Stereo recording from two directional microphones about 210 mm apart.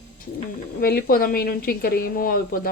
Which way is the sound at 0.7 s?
45° left (ahead or behind).